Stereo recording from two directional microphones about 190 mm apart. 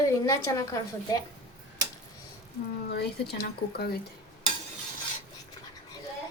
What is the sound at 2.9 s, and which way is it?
Speech, 55° left (ahead or behind).